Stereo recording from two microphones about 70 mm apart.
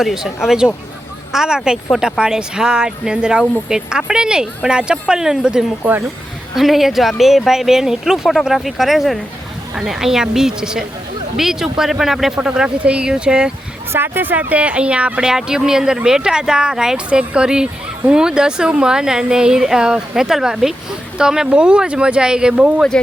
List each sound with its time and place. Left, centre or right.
0.0 s speech: centre
13.9 s speech: right; by 22.7 s centre